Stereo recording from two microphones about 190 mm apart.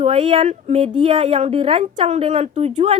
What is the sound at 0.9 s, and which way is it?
A woman's voice, 25° right (ahead or behind).